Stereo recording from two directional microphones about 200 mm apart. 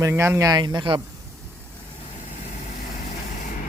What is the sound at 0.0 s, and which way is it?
Speech, 10° right (ahead or behind).